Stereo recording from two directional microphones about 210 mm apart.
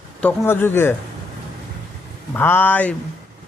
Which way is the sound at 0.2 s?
10° left (ahead or behind).